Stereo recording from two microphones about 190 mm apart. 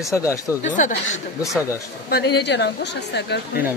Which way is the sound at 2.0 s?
60° left (ahead or behind).